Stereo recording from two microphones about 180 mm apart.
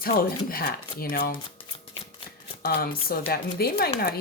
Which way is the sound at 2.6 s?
55° left (ahead or behind).